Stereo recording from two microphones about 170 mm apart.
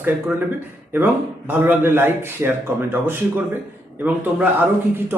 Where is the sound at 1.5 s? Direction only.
10° right (ahead or behind).